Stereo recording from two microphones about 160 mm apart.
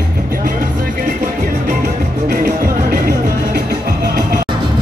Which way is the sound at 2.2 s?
65° right (ahead or behind).